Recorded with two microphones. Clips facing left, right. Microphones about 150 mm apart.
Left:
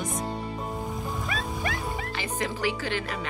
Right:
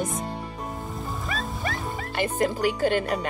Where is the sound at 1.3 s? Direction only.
Centre (ahead or behind).